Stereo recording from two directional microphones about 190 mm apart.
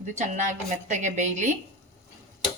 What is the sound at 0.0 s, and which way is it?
A woman's voice, 40° right (ahead or behind).